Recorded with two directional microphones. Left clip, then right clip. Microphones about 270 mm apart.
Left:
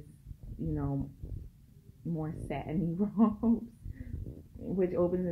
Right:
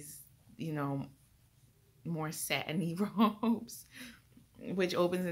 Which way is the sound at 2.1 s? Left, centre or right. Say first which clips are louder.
Right 3 dB; centre.